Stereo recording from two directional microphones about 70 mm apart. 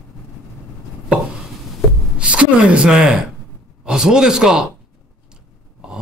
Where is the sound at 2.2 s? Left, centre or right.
Centre.